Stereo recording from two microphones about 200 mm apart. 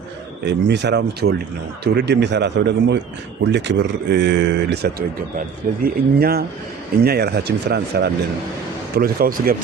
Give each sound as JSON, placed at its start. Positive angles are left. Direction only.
{"t": 0.4, "sound": "speech", "side_deg": -60}